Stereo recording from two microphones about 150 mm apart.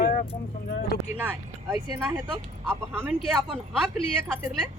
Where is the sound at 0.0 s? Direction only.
65° left (ahead or behind).